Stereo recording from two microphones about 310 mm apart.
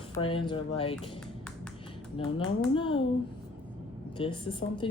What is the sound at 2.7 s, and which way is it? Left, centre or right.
Speech, centre.